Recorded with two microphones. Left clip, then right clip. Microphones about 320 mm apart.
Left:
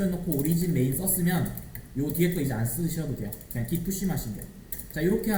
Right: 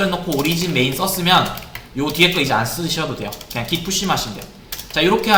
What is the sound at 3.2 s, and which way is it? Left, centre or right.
Speech, right.